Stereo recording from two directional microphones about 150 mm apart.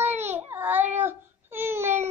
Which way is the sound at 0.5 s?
15° right (ahead or behind).